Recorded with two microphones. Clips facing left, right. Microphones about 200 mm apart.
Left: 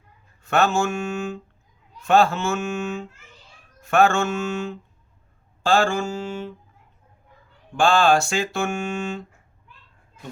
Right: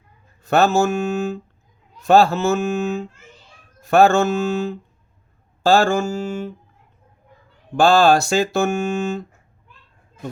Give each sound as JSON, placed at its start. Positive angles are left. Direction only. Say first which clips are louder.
{"t": 0.4, "sound": "speech", "louder": "right 4 dB", "side_deg": -35}
{"t": 5.6, "sound": "mantra", "louder": "right 4 dB", "side_deg": -40}
{"t": 7.8, "sound": "speech", "louder": "right 4 dB", "side_deg": -40}